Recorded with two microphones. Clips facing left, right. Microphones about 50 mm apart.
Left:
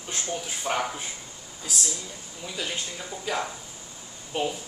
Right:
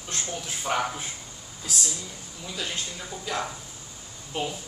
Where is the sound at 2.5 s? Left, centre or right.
Centre.